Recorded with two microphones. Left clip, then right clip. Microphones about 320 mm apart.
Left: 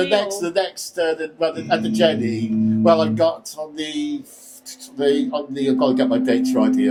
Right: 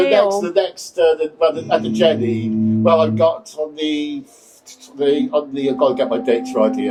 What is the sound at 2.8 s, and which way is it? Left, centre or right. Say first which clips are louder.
Speech: right 2 dB; left.